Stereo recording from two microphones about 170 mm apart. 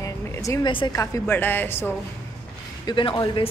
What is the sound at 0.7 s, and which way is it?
A woman's voice, 25° left (ahead or behind).